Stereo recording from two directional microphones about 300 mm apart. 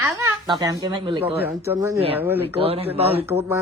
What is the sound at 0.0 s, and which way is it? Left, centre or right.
Speech, centre.